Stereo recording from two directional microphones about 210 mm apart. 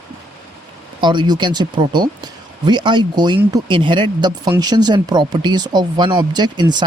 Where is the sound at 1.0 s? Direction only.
20° right (ahead or behind).